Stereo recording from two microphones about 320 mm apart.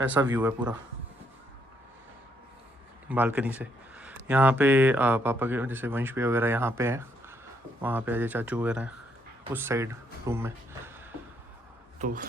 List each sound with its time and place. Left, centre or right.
0.1 s a man's voice: centre
3.1 s speech: centre
11.9 s speech: right